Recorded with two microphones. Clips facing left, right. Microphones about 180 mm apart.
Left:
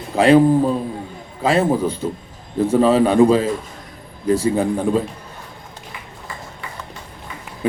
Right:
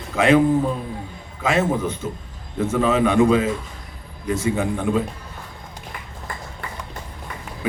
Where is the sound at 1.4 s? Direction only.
35° left (ahead or behind).